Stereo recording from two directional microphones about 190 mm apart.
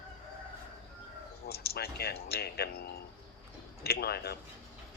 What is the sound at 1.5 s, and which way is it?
Speech, 55° left (ahead or behind).